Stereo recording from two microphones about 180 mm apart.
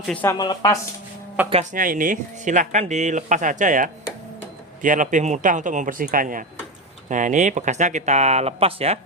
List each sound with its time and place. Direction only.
0.1 s speech: 10° left (ahead or behind)
0.3 s speech: 20° left (ahead or behind)
1.7 s speech: 50° right (ahead or behind); by 9.0 s 35° right (ahead or behind)